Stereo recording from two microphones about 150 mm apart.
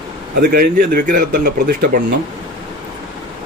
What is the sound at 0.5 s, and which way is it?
Speech, 75° right (ahead or behind).